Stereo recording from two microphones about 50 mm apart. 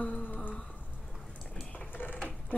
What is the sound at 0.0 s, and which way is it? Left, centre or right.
Humming, left.